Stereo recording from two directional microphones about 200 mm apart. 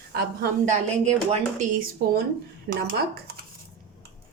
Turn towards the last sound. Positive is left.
turn(degrees=-50)  # may be behind; listen again after turning